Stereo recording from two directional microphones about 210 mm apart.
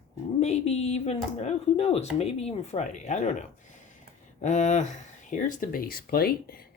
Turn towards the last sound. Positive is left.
turn(degrees=45)  # may be behind; listen again after turning